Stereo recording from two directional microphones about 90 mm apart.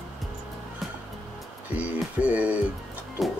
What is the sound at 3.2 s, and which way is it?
Music, centre (ahead or behind).